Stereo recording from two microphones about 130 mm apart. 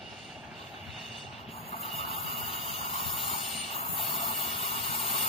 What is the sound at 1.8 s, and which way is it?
Vehicle, 50° left (ahead or behind).